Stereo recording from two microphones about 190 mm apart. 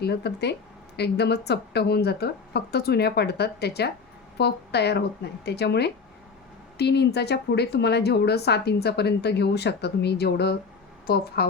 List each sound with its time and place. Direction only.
0.0 s a woman's voice: 60° left (ahead or behind)